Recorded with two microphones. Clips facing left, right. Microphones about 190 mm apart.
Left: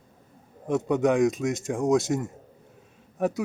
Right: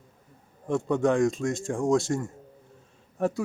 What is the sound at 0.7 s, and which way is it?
A man's voice, 20° left (ahead or behind).